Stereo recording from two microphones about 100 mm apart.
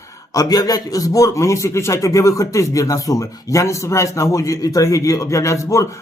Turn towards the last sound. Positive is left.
turn(degrees=30)  # may be behind; listen again after turning